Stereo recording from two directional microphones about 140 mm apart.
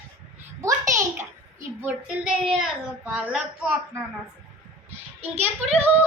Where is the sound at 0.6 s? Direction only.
20° right (ahead or behind).